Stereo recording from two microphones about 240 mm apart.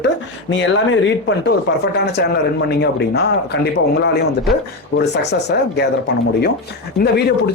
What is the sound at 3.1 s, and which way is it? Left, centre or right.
Speech, left.